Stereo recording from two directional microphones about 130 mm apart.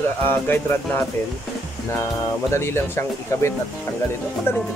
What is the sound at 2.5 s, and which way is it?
Speech, 20° left (ahead or behind).